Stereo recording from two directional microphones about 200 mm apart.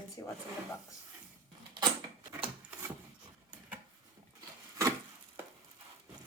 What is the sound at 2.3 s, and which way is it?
Wood, 10° right (ahead or behind).